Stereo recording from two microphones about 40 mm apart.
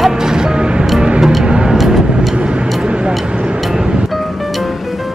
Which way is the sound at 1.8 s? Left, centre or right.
Centre.